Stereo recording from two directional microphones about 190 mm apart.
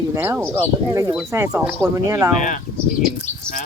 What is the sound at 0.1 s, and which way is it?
Speech, 15° right (ahead or behind).